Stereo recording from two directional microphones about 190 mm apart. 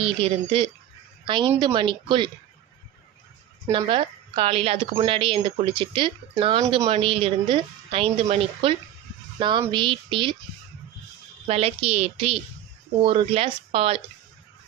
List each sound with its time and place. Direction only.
0.0 s a woman's voice: 30° right (ahead or behind)
3.7 s a woman's voice: 25° right (ahead or behind)
11.4 s a woman's voice: 30° right (ahead or behind)